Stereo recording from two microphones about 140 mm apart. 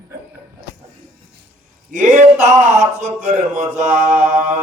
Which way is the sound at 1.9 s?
60° right (ahead or behind).